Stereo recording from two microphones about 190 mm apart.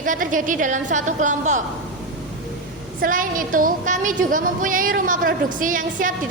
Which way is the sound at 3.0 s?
45° right (ahead or behind).